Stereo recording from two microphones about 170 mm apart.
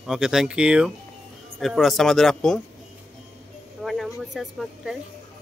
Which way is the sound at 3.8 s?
Centre (ahead or behind).